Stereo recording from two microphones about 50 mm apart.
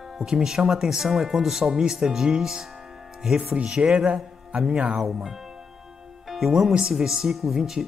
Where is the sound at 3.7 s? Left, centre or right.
Centre.